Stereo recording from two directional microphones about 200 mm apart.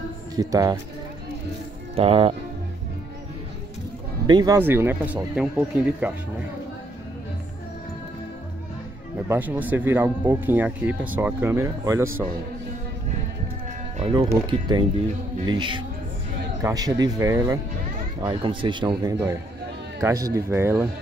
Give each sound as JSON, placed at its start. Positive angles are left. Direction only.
{"t": 0.4, "sound": "speech", "side_deg": -15}
{"t": 2.0, "sound": "speech", "side_deg": -30}
{"t": 4.3, "sound": "speech", "side_deg": -20}
{"t": 9.3, "sound": "speech", "side_deg": -10}
{"t": 13.9, "sound": "music", "side_deg": -25}
{"t": 14.3, "sound": "speech", "side_deg": -20}